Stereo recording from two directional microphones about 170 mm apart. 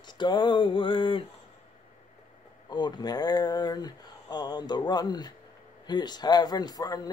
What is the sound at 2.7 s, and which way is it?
Speech, 25° left (ahead or behind).